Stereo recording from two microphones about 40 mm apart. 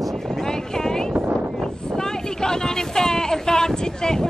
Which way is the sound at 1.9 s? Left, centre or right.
Centre.